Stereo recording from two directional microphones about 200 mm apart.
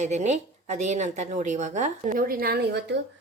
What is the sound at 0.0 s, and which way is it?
A woman's voice, 35° right (ahead or behind).